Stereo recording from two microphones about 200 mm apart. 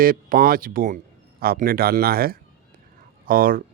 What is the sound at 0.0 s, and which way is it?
Speech, 45° right (ahead or behind).